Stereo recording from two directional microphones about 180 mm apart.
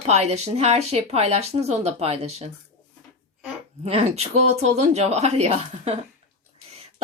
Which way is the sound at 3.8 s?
35° right (ahead or behind).